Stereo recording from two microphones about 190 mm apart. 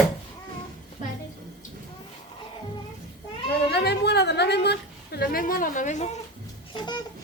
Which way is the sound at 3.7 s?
60° left (ahead or behind).